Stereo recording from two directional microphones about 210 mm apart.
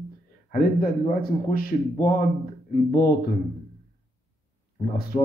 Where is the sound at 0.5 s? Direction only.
45° left (ahead or behind).